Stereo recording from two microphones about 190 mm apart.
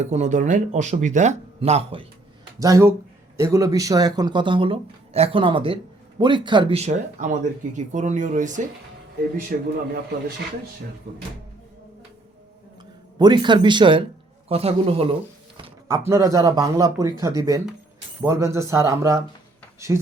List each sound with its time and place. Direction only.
0.0 s speech: 40° right (ahead or behind)
2.6 s speech: 15° right (ahead or behind); by 8.6 s 40° right (ahead or behind)
9.5 s a man's voice: 50° right (ahead or behind)
13.1 s speech: 20° right (ahead or behind)
15.5 s a sound: 25° right (ahead or behind)
16.0 s speech: 15° right (ahead or behind)